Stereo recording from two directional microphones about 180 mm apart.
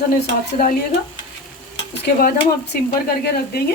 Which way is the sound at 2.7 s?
65° left (ahead or behind).